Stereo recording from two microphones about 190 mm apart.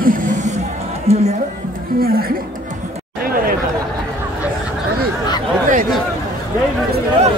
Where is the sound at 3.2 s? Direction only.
50° right (ahead or behind).